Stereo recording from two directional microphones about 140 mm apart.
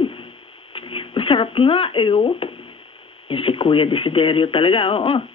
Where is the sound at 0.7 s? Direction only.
40° left (ahead or behind).